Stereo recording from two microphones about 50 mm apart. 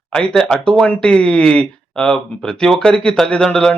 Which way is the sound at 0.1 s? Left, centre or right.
Centre.